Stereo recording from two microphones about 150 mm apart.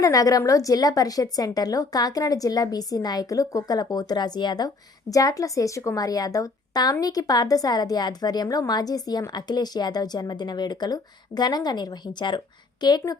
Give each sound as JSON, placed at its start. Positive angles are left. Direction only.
{"t": 0.0, "sound": "a woman's voice", "side_deg": 25}